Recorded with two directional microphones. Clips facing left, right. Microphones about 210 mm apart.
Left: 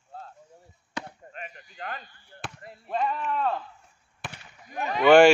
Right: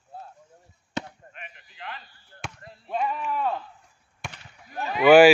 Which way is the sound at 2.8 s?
Centre (ahead or behind).